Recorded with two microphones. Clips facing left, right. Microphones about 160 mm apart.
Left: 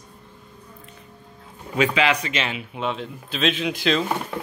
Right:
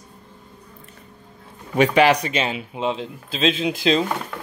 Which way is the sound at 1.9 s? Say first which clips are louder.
Right 6 dB; 40° right (ahead or behind).